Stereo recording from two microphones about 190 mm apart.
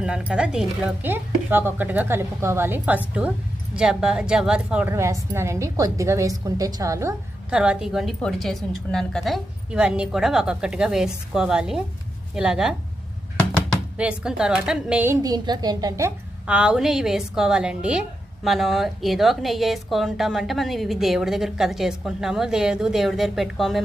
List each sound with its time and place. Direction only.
0.0 s a woman's voice: 5° right (ahead or behind)
7.5 s a woman's voice: 5° right (ahead or behind)
13.9 s a woman's voice: 5° right (ahead or behind)